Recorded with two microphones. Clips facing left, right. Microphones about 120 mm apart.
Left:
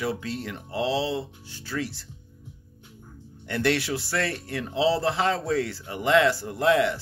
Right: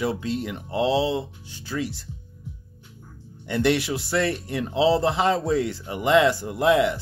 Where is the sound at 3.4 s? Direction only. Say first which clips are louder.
Right 3 dB; 15° right (ahead or behind).